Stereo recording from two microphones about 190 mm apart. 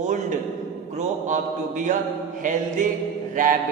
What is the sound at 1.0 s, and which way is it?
Speech, 40° right (ahead or behind).